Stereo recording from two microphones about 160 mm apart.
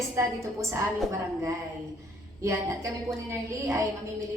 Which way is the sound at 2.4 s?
20° right (ahead or behind).